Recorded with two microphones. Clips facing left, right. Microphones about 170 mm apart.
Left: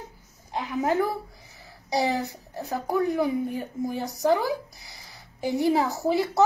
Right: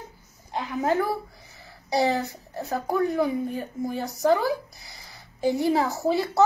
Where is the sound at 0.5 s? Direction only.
20° left (ahead or behind).